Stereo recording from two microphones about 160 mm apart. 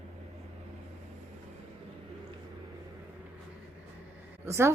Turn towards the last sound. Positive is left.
turn(degrees=-15)  # may be behind; listen again after turning